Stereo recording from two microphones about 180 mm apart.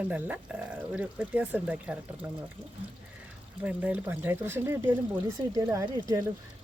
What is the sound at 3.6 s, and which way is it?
Speech, 10° right (ahead or behind).